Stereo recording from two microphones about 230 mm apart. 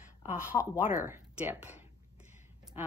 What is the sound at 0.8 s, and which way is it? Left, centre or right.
Speech, left.